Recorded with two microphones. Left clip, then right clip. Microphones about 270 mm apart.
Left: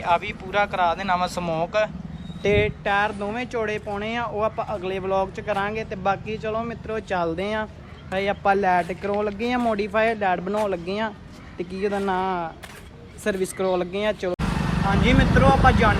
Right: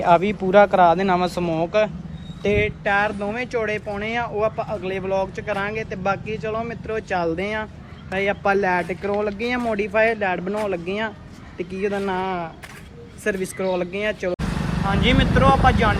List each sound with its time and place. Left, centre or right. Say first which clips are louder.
0.0 s speech: right 6 dB; centre
2.4 s speech: even; left
2.8 s speech: right 2 dB; centre